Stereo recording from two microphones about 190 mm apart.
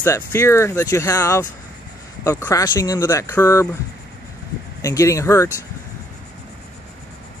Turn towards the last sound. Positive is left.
turn(degrees=15)  # may be behind; listen again after turning